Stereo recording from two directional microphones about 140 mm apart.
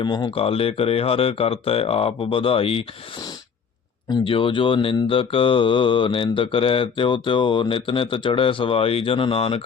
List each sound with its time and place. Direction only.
0.0 s speech: 35° left (ahead or behind)
4.1 s mantra: 40° left (ahead or behind)